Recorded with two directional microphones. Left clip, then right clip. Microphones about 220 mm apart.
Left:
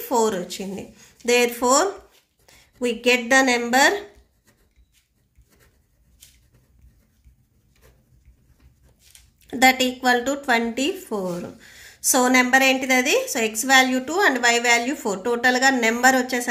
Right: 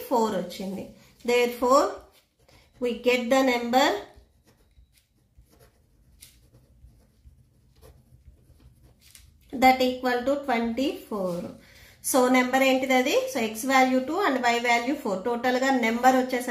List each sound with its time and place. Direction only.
0.1 s a woman's voice: 35° left (ahead or behind)
2.8 s a woman's voice: 45° left (ahead or behind)
9.5 s a woman's voice: 45° left (ahead or behind)